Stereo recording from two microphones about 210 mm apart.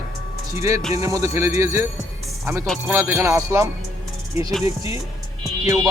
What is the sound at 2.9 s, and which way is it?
Speech, 10° right (ahead or behind).